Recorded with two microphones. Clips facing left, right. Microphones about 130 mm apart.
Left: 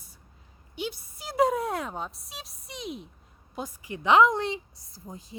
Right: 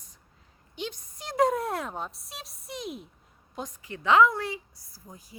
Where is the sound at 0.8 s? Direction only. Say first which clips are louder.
Left 2 dB; 10° left (ahead or behind).